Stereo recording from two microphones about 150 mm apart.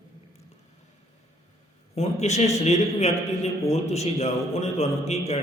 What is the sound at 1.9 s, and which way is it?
A man's voice, 45° left (ahead or behind).